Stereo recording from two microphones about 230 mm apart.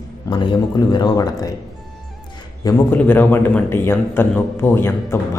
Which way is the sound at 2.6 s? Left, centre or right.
Centre.